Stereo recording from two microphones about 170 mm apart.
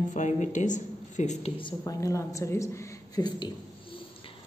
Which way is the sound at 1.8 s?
20° left (ahead or behind).